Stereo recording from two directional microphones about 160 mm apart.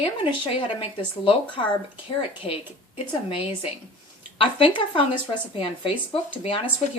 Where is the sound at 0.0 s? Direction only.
30° left (ahead or behind).